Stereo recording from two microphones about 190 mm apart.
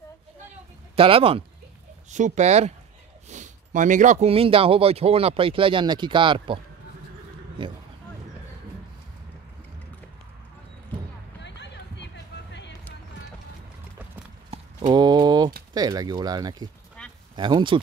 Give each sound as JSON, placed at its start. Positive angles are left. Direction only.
{"t": 0.9, "sound": "speech", "side_deg": -30}
{"t": 2.0, "sound": "speech", "side_deg": -40}
{"t": 11.4, "sound": "run", "side_deg": 65}
{"t": 14.5, "sound": "clip-clop", "side_deg": -35}
{"t": 14.9, "sound": "mantra", "side_deg": -20}
{"t": 15.7, "sound": "speech", "side_deg": -20}
{"t": 17.0, "sound": "a sound", "side_deg": 5}
{"t": 17.4, "sound": "speech", "side_deg": -25}